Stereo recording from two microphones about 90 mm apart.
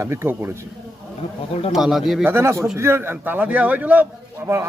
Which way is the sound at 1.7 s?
5° right (ahead or behind).